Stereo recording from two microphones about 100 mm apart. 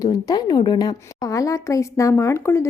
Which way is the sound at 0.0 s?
40° left (ahead or behind).